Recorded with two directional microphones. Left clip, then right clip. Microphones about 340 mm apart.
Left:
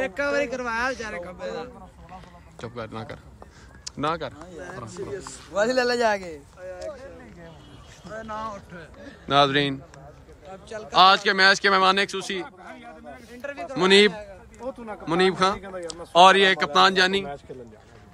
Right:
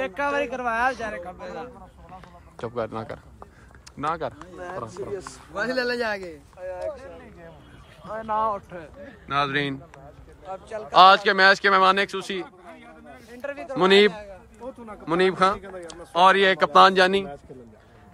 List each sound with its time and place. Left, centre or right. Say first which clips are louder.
0.0 s a man's voice: even; centre
4.6 s a man's voice: right 4 dB; centre
5.5 s speech: left 4 dB; centre
8.3 s a man's voice: right 10 dB; centre
9.3 s speech: left 4 dB; centre
10.5 s a man's voice: right 3 dB; centre
10.9 s speech: right 2 dB; centre
12.4 s a sound: left 3 dB; left
13.3 s a sound: right 1 dB; right
13.7 s speech: even; centre
15.6 s speech: left 3 dB; left
16.1 s speech: left 2 dB; centre